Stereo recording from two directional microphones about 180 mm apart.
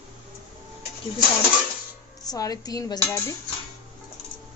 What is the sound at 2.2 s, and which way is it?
Speech, 20° left (ahead or behind).